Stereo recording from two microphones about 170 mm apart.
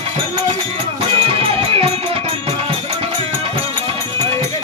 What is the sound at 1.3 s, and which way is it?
Music, 35° right (ahead or behind).